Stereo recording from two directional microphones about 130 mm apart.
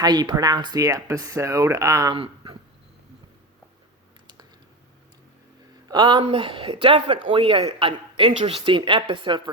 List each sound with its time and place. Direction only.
0.0 s speech: 30° right (ahead or behind)
2.1 s a sound: 40° right (ahead or behind)
5.9 s speech: 40° right (ahead or behind)